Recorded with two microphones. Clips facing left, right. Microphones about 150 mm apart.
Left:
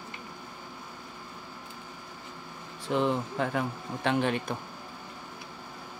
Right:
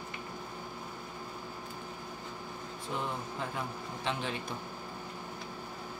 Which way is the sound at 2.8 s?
80° left.